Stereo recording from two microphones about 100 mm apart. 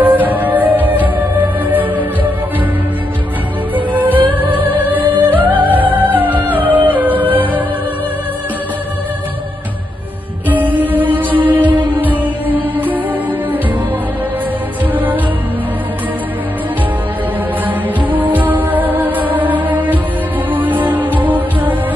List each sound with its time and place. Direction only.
0.0 s music: 15° right (ahead or behind)
4.9 s music: 15° right (ahead or behind)
10.5 s music: 15° right (ahead or behind)
17.6 s music: 15° right (ahead or behind)